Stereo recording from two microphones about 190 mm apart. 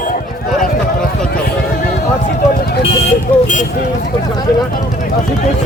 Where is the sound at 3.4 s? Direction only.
40° left (ahead or behind).